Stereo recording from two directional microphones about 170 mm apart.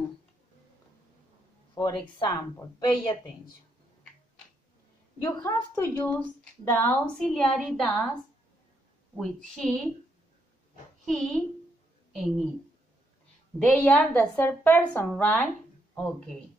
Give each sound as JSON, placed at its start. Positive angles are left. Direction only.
{"t": 1.8, "sound": "a woman's voice", "side_deg": 25}
{"t": 5.2, "sound": "a woman's voice", "side_deg": 10}
{"t": 9.1, "sound": "a woman's voice", "side_deg": 0}
{"t": 11.1, "sound": "a woman's voice", "side_deg": 5}
{"t": 13.7, "sound": "speech", "side_deg": 10}